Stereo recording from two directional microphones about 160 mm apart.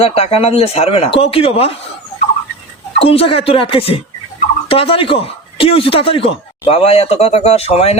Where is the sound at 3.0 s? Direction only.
35° left (ahead or behind).